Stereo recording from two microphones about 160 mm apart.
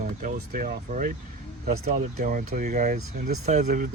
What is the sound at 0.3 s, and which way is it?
Speech, 75° right (ahead or behind).